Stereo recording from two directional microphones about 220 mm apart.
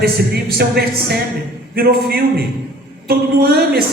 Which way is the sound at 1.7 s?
45° right (ahead or behind).